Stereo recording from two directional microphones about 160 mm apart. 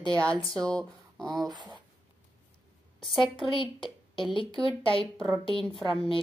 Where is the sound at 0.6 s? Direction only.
5° left (ahead or behind).